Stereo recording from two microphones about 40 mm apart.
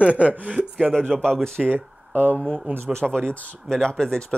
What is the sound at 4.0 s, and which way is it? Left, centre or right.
Speech, centre.